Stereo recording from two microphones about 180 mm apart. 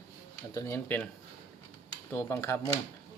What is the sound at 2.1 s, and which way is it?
Speech, 15° left (ahead or behind).